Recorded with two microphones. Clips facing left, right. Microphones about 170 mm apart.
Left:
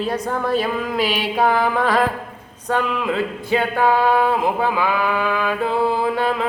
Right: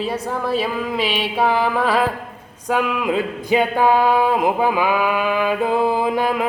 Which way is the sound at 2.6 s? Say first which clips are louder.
Right 1 dB; 10° right (ahead or behind).